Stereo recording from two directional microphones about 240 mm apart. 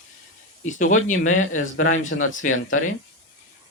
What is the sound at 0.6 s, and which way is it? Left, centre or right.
Speech, left.